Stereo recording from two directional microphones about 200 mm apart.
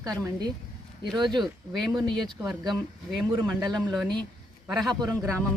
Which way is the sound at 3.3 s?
20° right (ahead or behind).